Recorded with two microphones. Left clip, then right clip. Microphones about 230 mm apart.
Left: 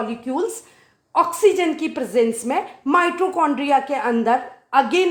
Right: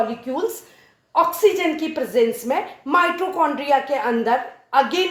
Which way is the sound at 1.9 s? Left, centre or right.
Left.